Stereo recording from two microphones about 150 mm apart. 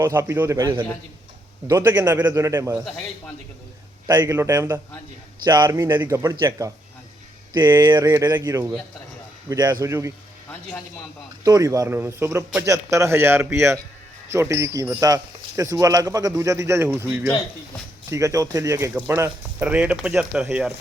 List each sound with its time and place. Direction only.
0.0 s a man's voice: 15° right (ahead or behind)
4.0 s a man's voice: 15° right (ahead or behind)
7.5 s a man's voice: 25° right (ahead or behind)
11.4 s a man's voice: 20° right (ahead or behind)